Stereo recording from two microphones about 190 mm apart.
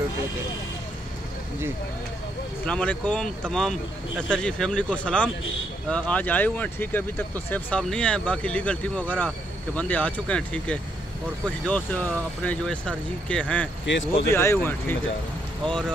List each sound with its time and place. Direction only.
2.6 s speech: 5° left (ahead or behind)
13.8 s speech: 75° left (ahead or behind)
14.3 s speech: 15° left (ahead or behind)